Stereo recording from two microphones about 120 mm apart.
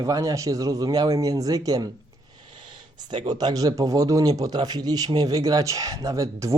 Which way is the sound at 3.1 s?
35° right (ahead or behind).